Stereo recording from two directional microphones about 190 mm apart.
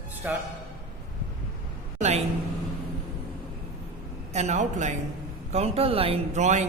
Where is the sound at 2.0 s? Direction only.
35° right (ahead or behind).